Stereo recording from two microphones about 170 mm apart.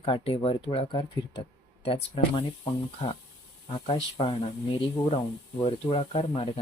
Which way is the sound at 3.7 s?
35° left (ahead or behind).